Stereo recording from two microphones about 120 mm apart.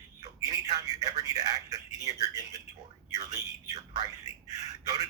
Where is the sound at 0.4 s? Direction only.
30° right (ahead or behind).